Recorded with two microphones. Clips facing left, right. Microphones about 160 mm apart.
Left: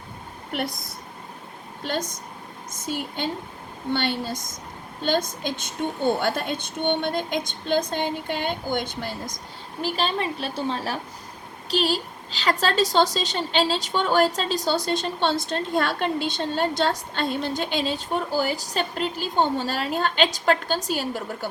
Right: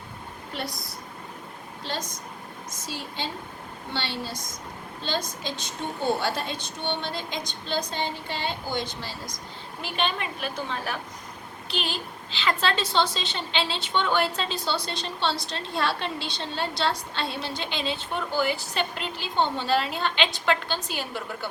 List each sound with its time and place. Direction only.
1.9 s a woman's voice: 50° left (ahead or behind)
9.8 s a woman's voice: 35° left (ahead or behind)